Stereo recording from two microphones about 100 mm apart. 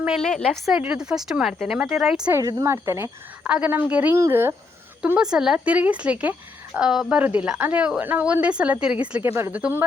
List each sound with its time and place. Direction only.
0.2 s a woman's voice: 5° left (ahead or behind)
0.8 s a woman's voice: 10° right (ahead or behind)
2.4 s a woman's voice: 35° right (ahead or behind)
3.5 s a woman's voice: 15° right (ahead or behind)
4.1 s a woman's voice: 25° right (ahead or behind)
5.1 s a woman's voice: 5° right (ahead or behind)
9.2 s a woman's voice: 25° right (ahead or behind)
9.5 s a woman's voice: 15° right (ahead or behind)